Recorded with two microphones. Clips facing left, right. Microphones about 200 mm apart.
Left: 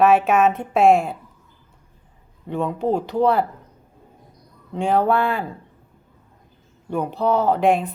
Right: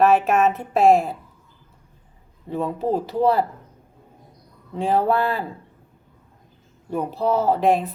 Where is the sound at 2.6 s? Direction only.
5° right (ahead or behind).